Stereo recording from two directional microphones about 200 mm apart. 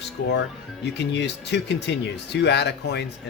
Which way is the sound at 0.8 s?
60° left (ahead or behind).